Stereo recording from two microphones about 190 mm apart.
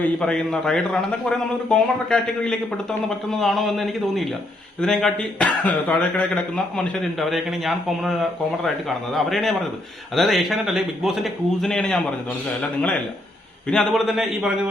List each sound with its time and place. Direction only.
0.0 s speech: 5° left (ahead or behind)
13.7 s speech: centre (ahead or behind)